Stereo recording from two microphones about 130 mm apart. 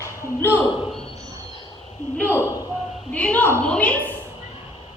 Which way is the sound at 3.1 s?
10° left (ahead or behind).